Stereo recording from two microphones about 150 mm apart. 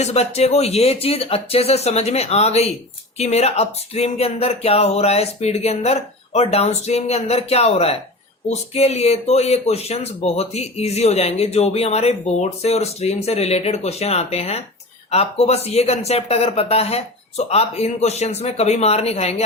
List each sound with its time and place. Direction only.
0.0 s speech: 45° left (ahead or behind)